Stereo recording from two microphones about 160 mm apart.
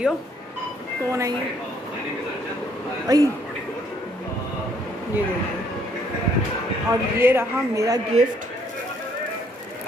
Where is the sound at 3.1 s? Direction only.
25° right (ahead or behind).